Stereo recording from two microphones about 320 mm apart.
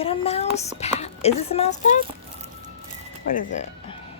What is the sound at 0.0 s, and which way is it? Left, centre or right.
Speech, centre.